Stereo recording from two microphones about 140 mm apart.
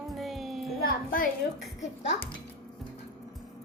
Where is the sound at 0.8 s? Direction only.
90° left.